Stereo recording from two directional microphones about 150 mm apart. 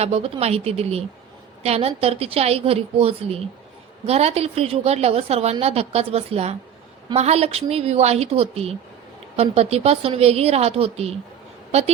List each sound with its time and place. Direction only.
0.0 s a woman's voice: 45° right (ahead or behind)